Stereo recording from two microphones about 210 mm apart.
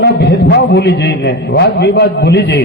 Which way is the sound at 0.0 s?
55° left (ahead or behind).